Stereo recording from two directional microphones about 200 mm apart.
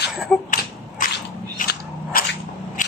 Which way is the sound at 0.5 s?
40° left (ahead or behind).